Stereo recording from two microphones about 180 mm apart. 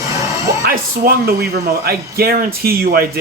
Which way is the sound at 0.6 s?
55° right (ahead or behind).